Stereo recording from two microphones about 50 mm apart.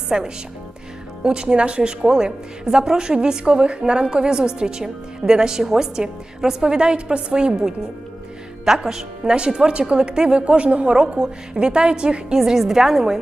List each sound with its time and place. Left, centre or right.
0.1 s a woman's voice: centre
12.4 s a woman's voice: centre